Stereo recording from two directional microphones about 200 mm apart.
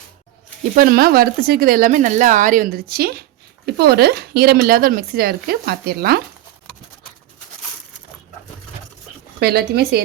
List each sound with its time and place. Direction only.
0.8 s speech: 45° right (ahead or behind)
9.4 s speech: 50° right (ahead or behind)